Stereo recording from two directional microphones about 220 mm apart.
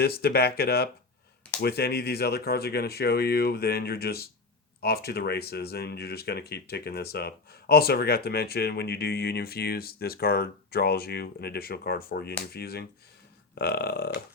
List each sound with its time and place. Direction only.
0.0 s speech: 45° left (ahead or behind)